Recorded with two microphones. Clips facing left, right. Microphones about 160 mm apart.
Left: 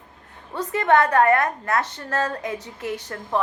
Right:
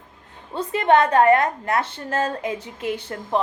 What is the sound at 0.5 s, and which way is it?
Speech, 15° right (ahead or behind).